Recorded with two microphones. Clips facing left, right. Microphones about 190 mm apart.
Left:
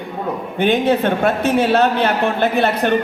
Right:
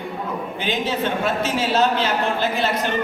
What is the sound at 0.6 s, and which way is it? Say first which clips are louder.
A man's voice: left 9 dB; 60° left (ahead or behind).